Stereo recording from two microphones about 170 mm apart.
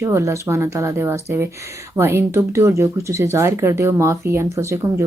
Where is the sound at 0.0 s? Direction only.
15° right (ahead or behind).